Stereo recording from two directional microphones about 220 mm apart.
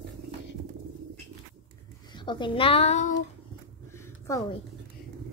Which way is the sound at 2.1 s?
20° left (ahead or behind).